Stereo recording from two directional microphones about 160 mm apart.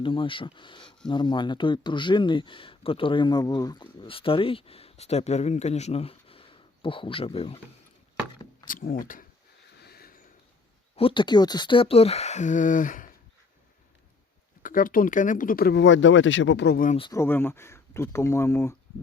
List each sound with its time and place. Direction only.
0.0 s speech: 30° left (ahead or behind)
8.6 s speech: 60° left (ahead or behind)
9.8 s a sound: 75° left (ahead or behind)
10.9 s speech: 35° left (ahead or behind); by 13.1 s 55° left (ahead or behind)
14.6 s speech: 60° left (ahead or behind); by 16.9 s 75° left (ahead or behind)
17.1 s speech: 15° left (ahead or behind)